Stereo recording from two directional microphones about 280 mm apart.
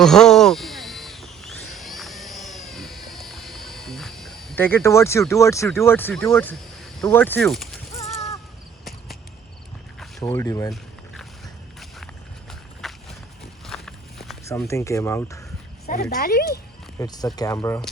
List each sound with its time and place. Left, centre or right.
0.0 s a sound: centre
7.0 s speech: centre
8.8 s cricket: centre
10.2 s speech: centre
10.7 s a sound: centre
12.5 s walk: centre
15.9 s speech: left
17.0 s speech: centre